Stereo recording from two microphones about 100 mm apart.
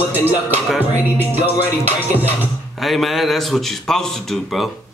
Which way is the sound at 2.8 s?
Centre (ahead or behind).